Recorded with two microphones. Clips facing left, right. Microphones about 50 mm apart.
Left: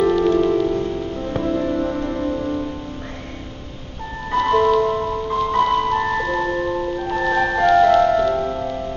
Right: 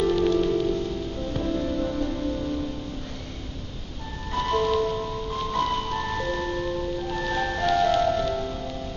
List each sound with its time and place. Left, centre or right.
0.0 s music: left
4.3 s music: left
5.6 s music: left
5.9 s music: left